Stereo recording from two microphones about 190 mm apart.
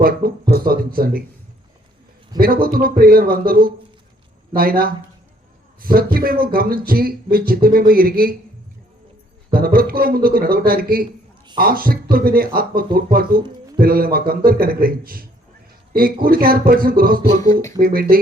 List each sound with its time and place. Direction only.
0.0 s speech: 50° right (ahead or behind)
2.4 s speech: 50° right (ahead or behind)
9.5 s speech: 50° right (ahead or behind)